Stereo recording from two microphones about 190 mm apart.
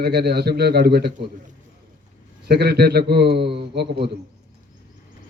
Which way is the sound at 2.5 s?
60° right (ahead or behind).